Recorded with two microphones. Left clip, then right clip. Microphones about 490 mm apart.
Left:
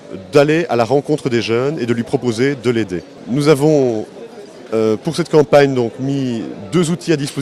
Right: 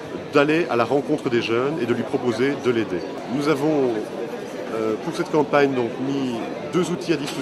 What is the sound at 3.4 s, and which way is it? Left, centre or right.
Speech, left.